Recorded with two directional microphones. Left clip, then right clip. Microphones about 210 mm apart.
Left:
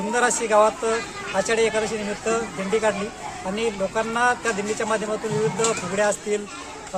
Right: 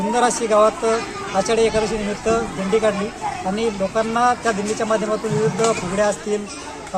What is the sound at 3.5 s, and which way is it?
Speech, 10° left (ahead or behind).